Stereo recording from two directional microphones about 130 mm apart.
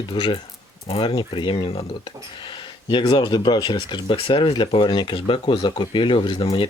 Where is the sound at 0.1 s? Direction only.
40° left (ahead or behind).